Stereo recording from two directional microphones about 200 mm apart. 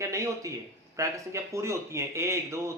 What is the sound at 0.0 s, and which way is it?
Speech, 15° right (ahead or behind).